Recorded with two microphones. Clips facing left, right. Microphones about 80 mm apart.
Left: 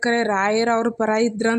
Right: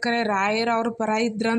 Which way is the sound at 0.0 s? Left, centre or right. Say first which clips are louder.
Left 3 dB; left.